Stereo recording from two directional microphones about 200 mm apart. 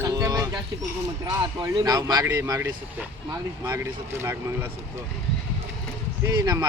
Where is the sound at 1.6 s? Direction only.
20° right (ahead or behind).